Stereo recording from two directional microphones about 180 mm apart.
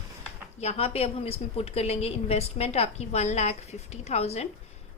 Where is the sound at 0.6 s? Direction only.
35° left (ahead or behind).